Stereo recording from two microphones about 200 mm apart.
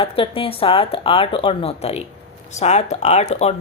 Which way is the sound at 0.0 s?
25° left (ahead or behind).